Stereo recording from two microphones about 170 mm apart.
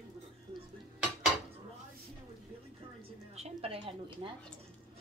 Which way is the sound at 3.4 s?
35° right (ahead or behind).